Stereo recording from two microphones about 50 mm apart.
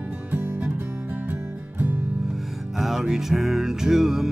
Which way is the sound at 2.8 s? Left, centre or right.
Centre.